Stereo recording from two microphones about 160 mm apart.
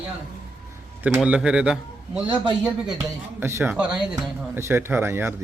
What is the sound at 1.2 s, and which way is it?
Speech, 5° right (ahead or behind).